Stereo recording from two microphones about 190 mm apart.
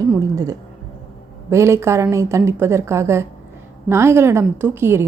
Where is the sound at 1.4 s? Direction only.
15° right (ahead or behind).